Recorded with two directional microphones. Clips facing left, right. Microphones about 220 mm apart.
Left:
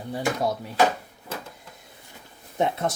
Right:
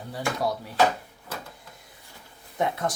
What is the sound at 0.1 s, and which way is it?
Speech, 20° left (ahead or behind).